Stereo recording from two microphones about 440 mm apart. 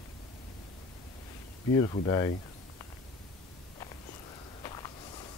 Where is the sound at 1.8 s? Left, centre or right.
Centre.